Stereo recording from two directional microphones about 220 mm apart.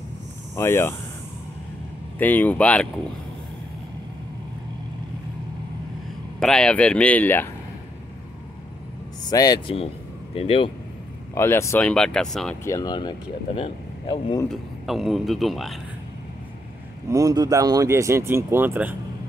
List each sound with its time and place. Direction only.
0.6 s speech: 10° left (ahead or behind)
2.1 s speech: 10° left (ahead or behind)
6.4 s a man's voice: 5° left (ahead or behind)
9.2 s speech: 15° left (ahead or behind)
11.3 s a man's voice: 10° left (ahead or behind)
12.6 s speech: 15° left (ahead or behind)
14.5 s a man's voice: centre (ahead or behind)
17.1 s speech: 15° right (ahead or behind)